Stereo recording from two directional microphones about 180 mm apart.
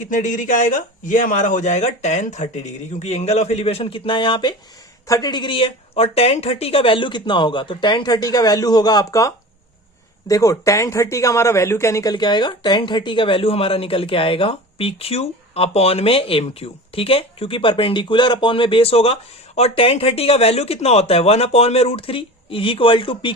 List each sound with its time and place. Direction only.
0.0 s a man's voice: 45° left (ahead or behind); by 23.3 s 30° left (ahead or behind)